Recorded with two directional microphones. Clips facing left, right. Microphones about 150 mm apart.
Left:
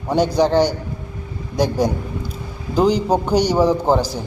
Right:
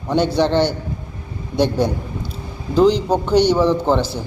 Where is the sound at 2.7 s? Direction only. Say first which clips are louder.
Right 2 dB; 10° left (ahead or behind).